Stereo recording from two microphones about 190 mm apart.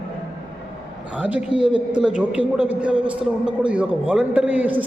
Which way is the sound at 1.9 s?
5° right (ahead or behind).